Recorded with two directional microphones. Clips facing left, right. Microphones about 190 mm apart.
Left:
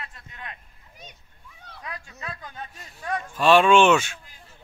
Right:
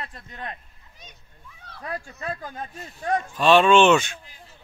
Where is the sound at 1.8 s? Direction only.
50° right (ahead or behind).